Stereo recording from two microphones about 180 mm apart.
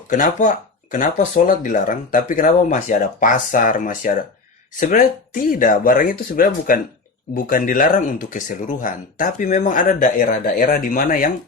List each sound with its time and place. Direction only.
0.1 s speech: 45° left (ahead or behind)